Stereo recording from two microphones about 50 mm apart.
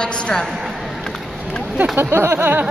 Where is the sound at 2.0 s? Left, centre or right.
Right.